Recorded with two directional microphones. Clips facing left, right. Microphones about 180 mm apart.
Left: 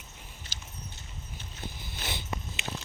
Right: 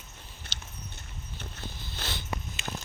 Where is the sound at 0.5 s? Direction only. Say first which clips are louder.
Right 3 dB; 45° left (ahead or behind).